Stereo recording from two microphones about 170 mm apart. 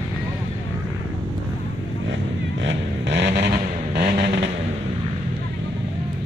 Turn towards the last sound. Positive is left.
turn(degrees=-75)  # may be behind; listen again after turning